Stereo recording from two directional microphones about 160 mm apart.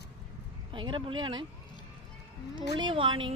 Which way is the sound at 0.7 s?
30° right (ahead or behind).